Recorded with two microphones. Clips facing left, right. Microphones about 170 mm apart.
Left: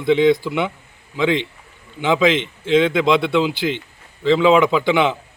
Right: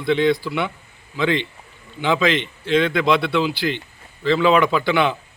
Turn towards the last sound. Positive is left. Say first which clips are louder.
# left 2 dB
turn(degrees=20)  # may be behind; listen again after turning